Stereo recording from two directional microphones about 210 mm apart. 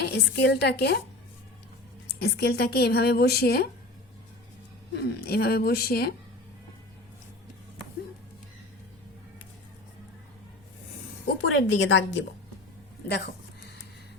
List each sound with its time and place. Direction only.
0.0 s a woman's voice: 50° left (ahead or behind)
2.1 s a woman's voice: 50° left (ahead or behind)
4.9 s a woman's voice: 50° left (ahead or behind)
11.4 s a woman's voice: 65° left (ahead or behind)
13.1 s a sound: 50° left (ahead or behind)